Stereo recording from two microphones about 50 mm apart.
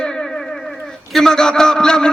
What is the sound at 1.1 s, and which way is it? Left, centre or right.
Speech, centre.